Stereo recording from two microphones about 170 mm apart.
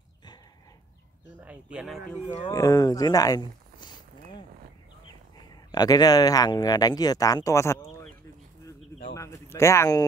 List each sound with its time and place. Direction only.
1.4 s speech: 5° right (ahead or behind)
2.5 s a sound: 20° left (ahead or behind)
5.7 s speech: 20° left (ahead or behind)
9.1 s speech: 15° left (ahead or behind)